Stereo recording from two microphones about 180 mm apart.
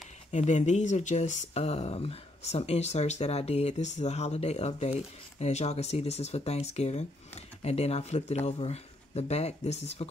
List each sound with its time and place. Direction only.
0.3 s speech: 40° left (ahead or behind)